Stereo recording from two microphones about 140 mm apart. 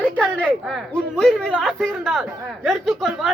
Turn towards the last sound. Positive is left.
turn(degrees=0)  # may be behind; listen again after turning